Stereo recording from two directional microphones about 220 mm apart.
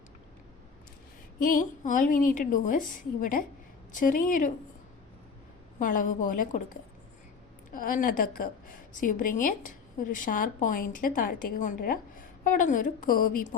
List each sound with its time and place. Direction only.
1.4 s a woman's voice: 40° left (ahead or behind)
5.8 s a woman's voice: 35° left (ahead or behind)